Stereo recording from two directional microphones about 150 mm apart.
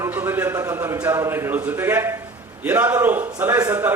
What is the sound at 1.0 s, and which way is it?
A man's voice, 15° right (ahead or behind).